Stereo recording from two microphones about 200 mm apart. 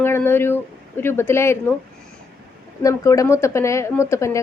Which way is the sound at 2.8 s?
15° left (ahead or behind).